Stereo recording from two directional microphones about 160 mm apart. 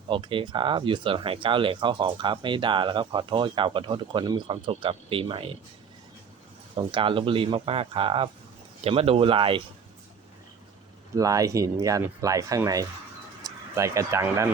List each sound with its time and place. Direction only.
0.1 s speech: 30° right (ahead or behind)
6.7 s speech: 30° right (ahead or behind)
11.1 s speech: 20° right (ahead or behind)
13.4 s a sound: 20° right (ahead or behind)